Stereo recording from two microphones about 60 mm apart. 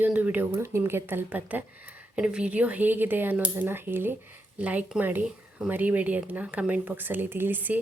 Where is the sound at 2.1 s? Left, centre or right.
Centre; by 4.2 s right.